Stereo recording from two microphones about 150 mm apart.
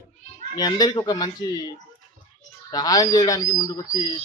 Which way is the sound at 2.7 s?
25° left (ahead or behind).